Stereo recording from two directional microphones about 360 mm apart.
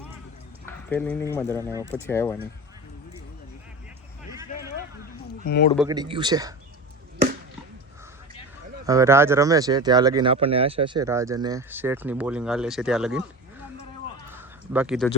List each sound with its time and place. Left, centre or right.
0.6 s a sound: centre
1.4 s speech: centre
5.4 s speech: left
5.7 s speech: centre
8.9 s speech: centre
14.3 s a sound: centre